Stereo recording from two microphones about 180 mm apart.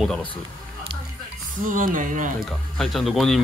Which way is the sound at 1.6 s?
45° right (ahead or behind).